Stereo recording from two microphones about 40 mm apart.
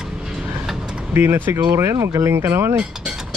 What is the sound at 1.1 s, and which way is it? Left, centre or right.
Speech, right.